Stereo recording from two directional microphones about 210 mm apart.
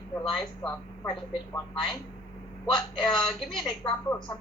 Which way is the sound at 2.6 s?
Centre (ahead or behind).